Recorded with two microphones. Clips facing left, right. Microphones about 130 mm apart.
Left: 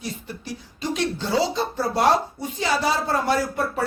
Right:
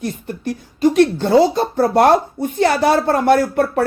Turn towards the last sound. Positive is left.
turn(degrees=-60)  # may be behind; listen again after turning